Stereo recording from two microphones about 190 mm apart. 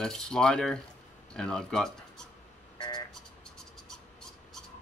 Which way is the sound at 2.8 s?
20° left (ahead or behind).